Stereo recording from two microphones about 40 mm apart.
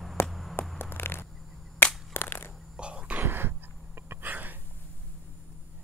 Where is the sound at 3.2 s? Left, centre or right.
Right.